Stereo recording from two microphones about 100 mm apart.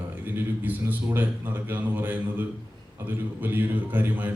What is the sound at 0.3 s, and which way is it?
A man's voice, 20° right (ahead or behind).